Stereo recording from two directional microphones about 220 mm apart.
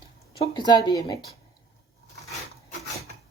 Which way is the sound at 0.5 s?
20° left (ahead or behind).